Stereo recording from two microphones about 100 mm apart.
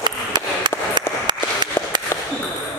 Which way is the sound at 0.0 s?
50° right (ahead or behind).